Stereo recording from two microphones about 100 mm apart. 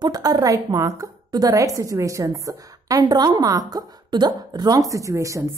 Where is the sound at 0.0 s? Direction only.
40° right (ahead or behind).